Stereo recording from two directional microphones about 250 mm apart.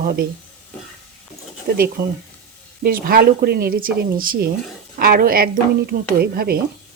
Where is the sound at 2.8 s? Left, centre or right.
Right.